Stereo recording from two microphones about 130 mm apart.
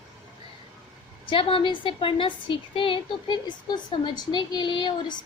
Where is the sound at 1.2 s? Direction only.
40° left (ahead or behind).